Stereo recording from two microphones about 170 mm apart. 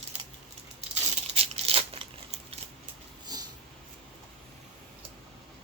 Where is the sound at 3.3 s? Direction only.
25° right (ahead or behind).